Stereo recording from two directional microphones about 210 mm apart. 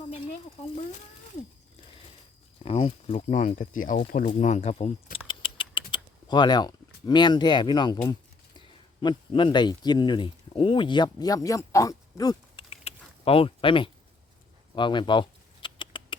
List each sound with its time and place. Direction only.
2.6 s speech: 25° left (ahead or behind)
5.3 s patter: 25° left (ahead or behind)
5.9 s speech: 20° left (ahead or behind)
14.8 s typing: 20° left (ahead or behind)